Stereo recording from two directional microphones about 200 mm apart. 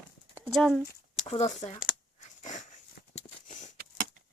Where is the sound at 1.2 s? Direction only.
25° left (ahead or behind).